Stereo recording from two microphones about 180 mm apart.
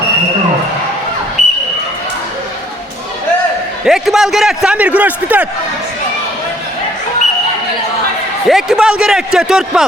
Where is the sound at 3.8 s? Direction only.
Centre (ahead or behind).